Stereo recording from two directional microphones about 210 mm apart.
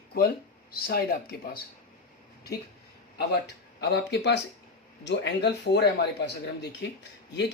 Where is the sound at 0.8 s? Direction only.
45° left (ahead or behind).